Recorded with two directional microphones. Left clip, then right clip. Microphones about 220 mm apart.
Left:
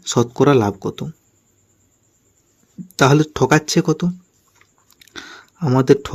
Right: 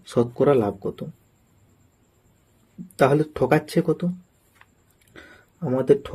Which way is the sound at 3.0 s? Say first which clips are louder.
Left 4 dB; 40° left (ahead or behind).